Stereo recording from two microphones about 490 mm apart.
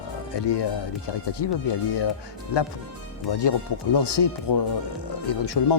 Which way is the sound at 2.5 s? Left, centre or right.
Left.